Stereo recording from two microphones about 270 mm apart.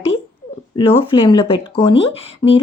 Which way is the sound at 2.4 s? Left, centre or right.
Centre.